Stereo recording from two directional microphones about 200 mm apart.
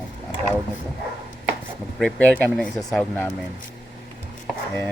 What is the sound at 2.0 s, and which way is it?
Speech, 5° left (ahead or behind).